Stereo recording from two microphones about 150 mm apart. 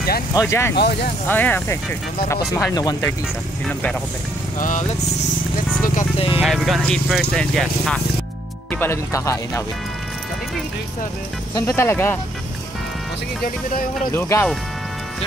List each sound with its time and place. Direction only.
0.3 s speech: 20° left (ahead or behind)
0.7 s speech: 90° left
1.3 s speech: 10° left (ahead or behind)
2.5 s speech: 25° left (ahead or behind)
4.6 s speech: 60° left (ahead or behind)
6.4 s speech: centre (ahead or behind)
8.7 s speech: 15° left (ahead or behind)
11.5 s speech: 20° left (ahead or behind)
14.1 s speech: 15° left (ahead or behind)